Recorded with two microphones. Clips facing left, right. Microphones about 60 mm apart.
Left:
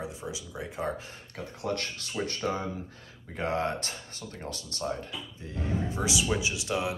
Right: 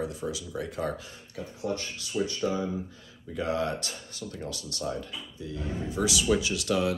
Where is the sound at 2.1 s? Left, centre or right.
Left.